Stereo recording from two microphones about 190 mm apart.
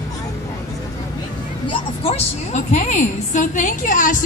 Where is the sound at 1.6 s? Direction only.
30° left (ahead or behind).